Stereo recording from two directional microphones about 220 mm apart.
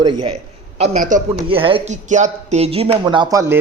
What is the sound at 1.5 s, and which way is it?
Speech, 25° right (ahead or behind).